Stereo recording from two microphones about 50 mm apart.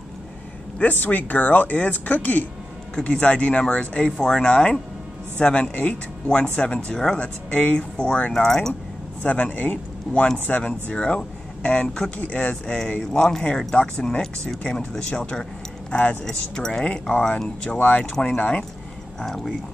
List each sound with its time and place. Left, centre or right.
0.7 s speech: left
3.0 s speech: left
8.3 s speech: centre
9.2 s a man's voice: left
10.6 s speech: centre
13.1 s speech: centre
15.0 s speech: centre
15.9 s speech: left
16.3 s speech: centre
17.7 s speech: left
19.2 s speech: centre